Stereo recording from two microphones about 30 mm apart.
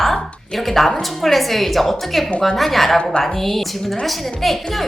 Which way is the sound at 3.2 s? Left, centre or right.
Centre.